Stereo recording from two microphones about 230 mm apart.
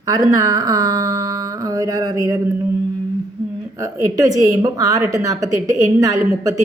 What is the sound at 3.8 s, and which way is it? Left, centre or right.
Speech, centre.